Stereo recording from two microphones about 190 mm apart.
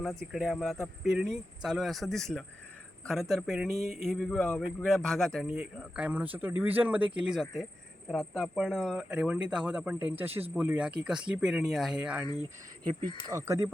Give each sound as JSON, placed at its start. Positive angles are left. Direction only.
{"t": 0.0, "sound": "speech", "side_deg": 0}
{"t": 12.2, "sound": "speech", "side_deg": 20}
{"t": 13.2, "sound": "speech", "side_deg": -15}